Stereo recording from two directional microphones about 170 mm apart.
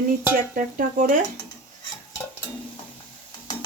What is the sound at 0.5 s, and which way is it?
Speech, 50° right (ahead or behind).